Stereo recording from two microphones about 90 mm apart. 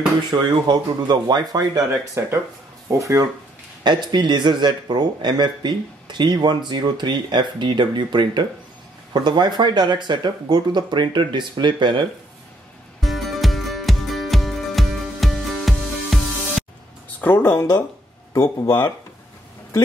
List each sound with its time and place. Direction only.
0.3 s speech: 55° right (ahead or behind)
1.9 s speech: 25° right (ahead or behind)
2.9 s speech: 35° right (ahead or behind)
3.8 s speech: 55° right (ahead or behind)
13.0 s music: centre (ahead or behind)
17.2 s speech: 20° left (ahead or behind)